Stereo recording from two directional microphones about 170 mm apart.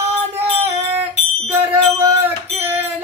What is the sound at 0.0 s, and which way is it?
Music, 40° right (ahead or behind).